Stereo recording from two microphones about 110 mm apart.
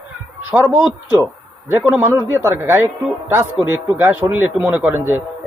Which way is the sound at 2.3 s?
20° right (ahead or behind).